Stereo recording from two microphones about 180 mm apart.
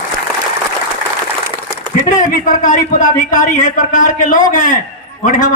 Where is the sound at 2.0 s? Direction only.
45° left (ahead or behind).